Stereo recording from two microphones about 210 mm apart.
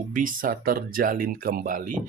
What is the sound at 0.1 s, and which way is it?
Speech, 40° right (ahead or behind).